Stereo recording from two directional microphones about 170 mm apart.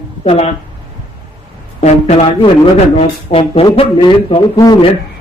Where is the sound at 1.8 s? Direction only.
35° left (ahead or behind).